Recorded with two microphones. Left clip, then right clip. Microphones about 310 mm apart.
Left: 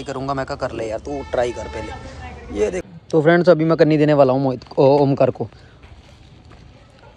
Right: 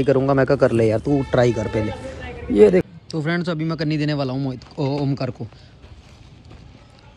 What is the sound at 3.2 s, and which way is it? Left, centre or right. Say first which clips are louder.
Speech: left 11 dB; left.